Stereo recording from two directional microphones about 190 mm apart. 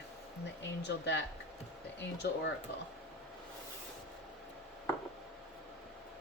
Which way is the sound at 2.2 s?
60° left (ahead or behind).